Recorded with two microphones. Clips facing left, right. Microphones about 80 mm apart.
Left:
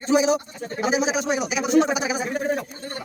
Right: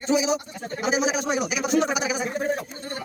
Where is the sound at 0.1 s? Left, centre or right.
Left.